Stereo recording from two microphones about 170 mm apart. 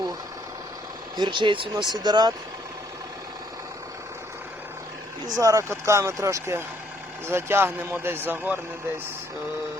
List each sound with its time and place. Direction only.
1.1 s speech: 25° right (ahead or behind)
5.4 s speech: 20° right (ahead or behind)